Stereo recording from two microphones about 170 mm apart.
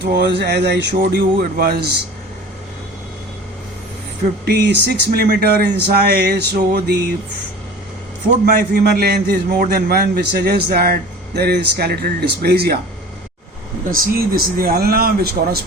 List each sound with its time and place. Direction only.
0.0 s a man's voice: 80° right
4.4 s a man's voice: 80° right
8.4 s a man's voice: 60° right (ahead or behind)
13.9 s speech: 60° right (ahead or behind)